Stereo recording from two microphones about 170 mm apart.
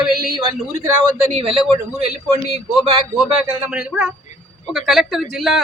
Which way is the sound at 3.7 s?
5° right (ahead or behind).